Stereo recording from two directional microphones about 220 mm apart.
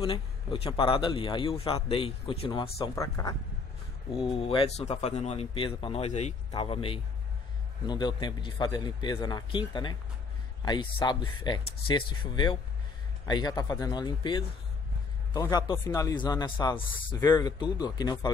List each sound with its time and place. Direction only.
0.0 s a man's voice: 25° left (ahead or behind)
4.4 s a man's voice: 25° left (ahead or behind)